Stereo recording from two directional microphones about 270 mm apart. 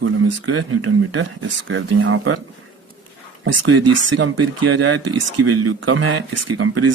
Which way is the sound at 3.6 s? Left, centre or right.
Right.